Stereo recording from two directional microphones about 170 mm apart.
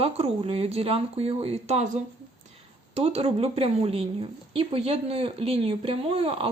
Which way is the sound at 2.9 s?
35° right (ahead or behind).